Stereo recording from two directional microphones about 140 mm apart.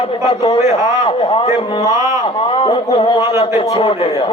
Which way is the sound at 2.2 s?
40° left (ahead or behind).